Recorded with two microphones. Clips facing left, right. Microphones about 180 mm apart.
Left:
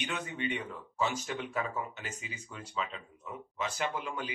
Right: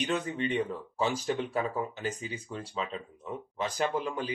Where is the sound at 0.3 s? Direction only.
35° right (ahead or behind).